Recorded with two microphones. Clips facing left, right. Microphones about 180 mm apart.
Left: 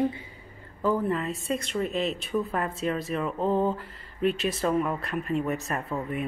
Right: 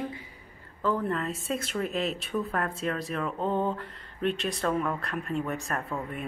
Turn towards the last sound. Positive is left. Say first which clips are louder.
# left 3 dB
turn(degrees=0)  # may be behind; listen again after turning